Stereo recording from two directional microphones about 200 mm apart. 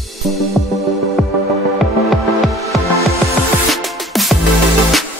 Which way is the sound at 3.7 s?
Centre (ahead or behind).